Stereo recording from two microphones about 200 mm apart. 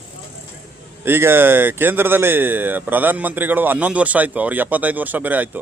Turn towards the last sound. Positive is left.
turn(degrees=-10)  # may be behind; listen again after turning